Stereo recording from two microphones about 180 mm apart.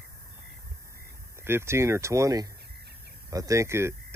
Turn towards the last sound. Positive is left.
turn(degrees=-15)  # may be behind; listen again after turning